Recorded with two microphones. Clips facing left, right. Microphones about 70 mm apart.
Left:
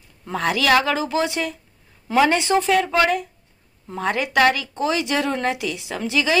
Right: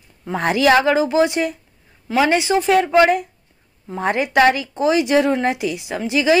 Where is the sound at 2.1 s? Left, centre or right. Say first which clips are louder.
Right 1 dB; centre.